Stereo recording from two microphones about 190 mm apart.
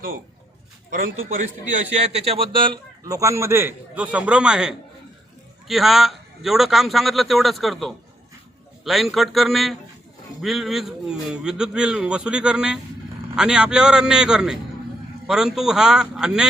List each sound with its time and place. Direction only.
1.0 s a man's voice: 40° right (ahead or behind); by 16.5 s 5° right (ahead or behind)